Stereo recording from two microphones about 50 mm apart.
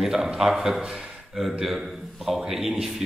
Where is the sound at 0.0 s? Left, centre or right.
Centre.